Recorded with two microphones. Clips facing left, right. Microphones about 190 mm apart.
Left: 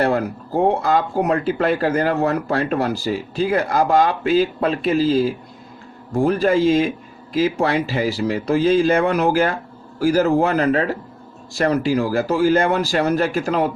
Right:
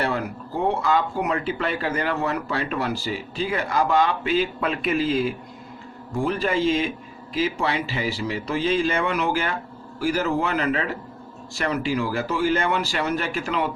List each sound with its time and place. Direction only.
0.0 s speech: 45° left (ahead or behind)